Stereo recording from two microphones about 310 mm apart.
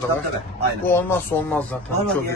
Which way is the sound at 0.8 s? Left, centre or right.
Centre.